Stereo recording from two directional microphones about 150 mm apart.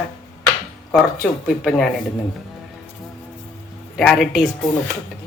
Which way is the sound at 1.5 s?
5° left (ahead or behind).